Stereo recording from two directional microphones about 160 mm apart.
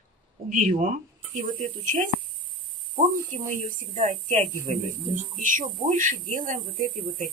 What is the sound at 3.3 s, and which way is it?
Speech, 40° right (ahead or behind).